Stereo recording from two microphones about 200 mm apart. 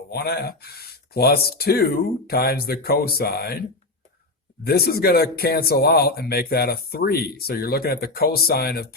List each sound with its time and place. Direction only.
0.1 s speech: 55° left (ahead or behind)
4.6 s speech: 50° left (ahead or behind)